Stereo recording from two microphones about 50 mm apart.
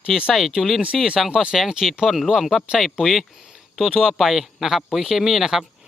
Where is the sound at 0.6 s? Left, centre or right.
Centre.